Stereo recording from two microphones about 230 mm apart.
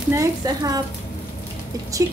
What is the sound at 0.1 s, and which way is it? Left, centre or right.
Speech, centre.